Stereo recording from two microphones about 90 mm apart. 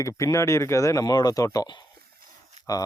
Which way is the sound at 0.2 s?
35° left (ahead or behind).